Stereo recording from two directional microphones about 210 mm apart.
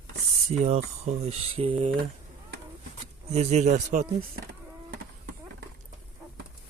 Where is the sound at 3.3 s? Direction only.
30° right (ahead or behind).